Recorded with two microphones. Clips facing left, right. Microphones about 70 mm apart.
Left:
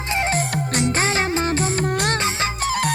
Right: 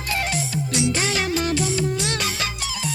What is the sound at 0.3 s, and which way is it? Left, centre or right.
Music, left.